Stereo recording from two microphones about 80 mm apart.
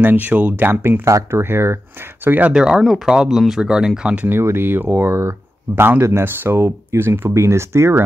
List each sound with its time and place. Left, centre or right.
0.0 s speech: right
1.0 s speech: right
2.5 s speech: centre
4.3 s speech: right